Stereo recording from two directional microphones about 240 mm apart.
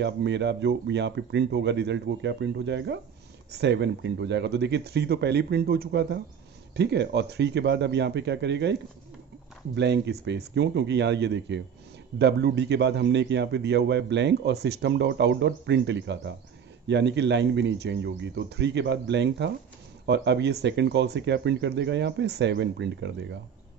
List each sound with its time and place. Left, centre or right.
0.0 s a man's voice: right
9.8 s a man's voice: right